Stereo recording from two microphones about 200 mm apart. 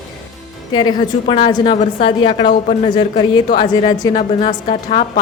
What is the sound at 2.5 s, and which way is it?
Speech, 40° left (ahead or behind).